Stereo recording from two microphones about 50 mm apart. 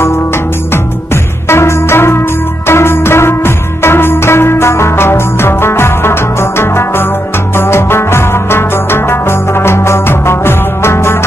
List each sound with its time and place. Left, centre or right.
1.5 s music: left